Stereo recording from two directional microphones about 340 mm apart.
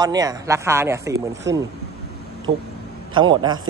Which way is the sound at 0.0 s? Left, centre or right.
Centre.